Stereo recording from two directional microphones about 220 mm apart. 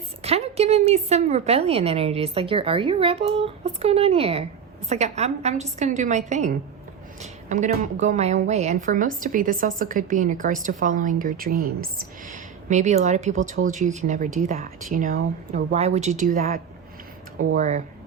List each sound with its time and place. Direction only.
0.2 s a woman's voice: 30° right (ahead or behind)
17.6 s a woman's voice: 35° right (ahead or behind)